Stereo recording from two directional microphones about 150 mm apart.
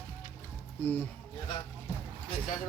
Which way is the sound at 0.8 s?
10° left (ahead or behind).